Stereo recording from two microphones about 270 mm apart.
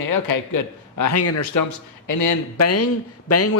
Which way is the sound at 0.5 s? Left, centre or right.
Left.